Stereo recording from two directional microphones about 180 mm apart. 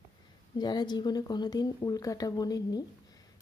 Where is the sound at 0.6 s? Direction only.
25° left (ahead or behind).